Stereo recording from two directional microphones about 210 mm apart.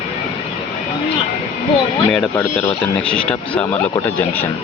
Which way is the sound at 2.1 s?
5° left (ahead or behind).